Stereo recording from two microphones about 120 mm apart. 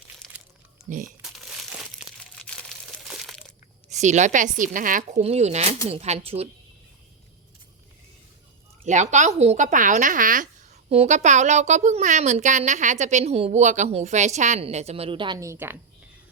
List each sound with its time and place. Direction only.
0.2 s crumpling: 5° left (ahead or behind)
0.9 s a woman's voice: 90° right
1.2 s crumpling: 5° right (ahead or behind)
3.1 s crushing: centre (ahead or behind)
3.8 s a woman's voice: 75° right (ahead or behind); by 6.5 s 55° right (ahead or behind)
8.8 s a woman's voice: 85° right
10.8 s a woman's voice: 60° right (ahead or behind); by 14.6 s 75° right (ahead or behind)
14.6 s a woman's voice: 65° right (ahead or behind); by 15.4 s 45° right (ahead or behind)
15.4 s a woman's voice: 20° right (ahead or behind)